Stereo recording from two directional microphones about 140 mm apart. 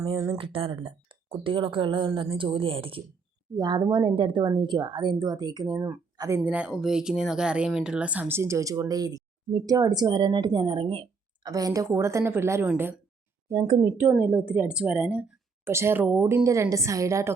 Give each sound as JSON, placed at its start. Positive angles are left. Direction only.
{"t": 0.0, "sound": "speech", "side_deg": -25}
{"t": 0.3, "sound": "speech", "side_deg": -40}
{"t": 11.4, "sound": "speech", "side_deg": -25}
{"t": 13.5, "sound": "speech", "side_deg": -25}
{"t": 14.0, "sound": "a woman's voice", "side_deg": -10}